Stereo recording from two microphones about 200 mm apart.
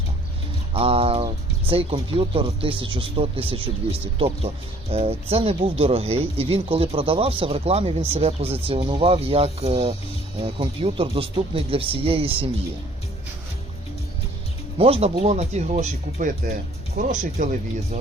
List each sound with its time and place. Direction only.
0.7 s speech: 30° right (ahead or behind)
14.8 s speech: 30° right (ahead or behind)